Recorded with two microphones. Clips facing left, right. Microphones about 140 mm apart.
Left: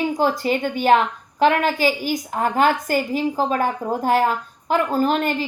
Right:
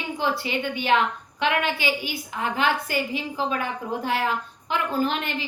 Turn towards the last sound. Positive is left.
turn(degrees=40)  # may be behind; listen again after turning